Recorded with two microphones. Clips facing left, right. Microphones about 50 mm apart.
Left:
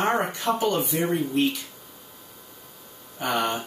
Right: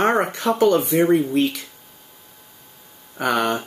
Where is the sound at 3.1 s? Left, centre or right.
Right.